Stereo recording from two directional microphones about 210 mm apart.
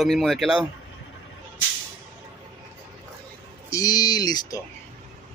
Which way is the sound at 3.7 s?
20° left (ahead or behind).